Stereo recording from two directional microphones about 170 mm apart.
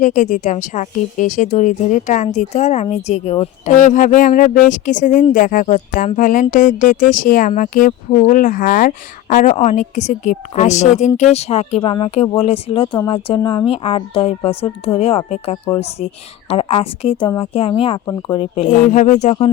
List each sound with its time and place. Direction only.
0.0 s a woman's voice: 45° left (ahead or behind)
18.8 s speech: 45° left (ahead or behind)